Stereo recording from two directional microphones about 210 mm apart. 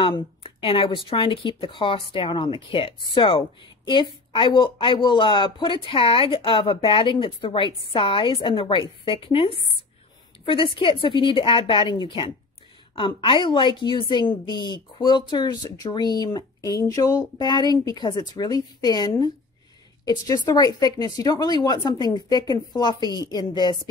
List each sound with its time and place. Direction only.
0.0 s speech: 25° left (ahead or behind)